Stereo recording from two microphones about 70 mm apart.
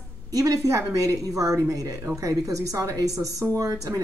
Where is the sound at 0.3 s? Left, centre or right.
Right.